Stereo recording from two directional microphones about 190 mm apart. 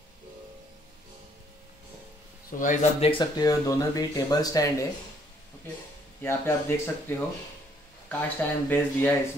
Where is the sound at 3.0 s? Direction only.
25° left (ahead or behind).